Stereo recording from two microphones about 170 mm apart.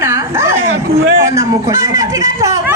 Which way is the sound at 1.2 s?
15° right (ahead or behind).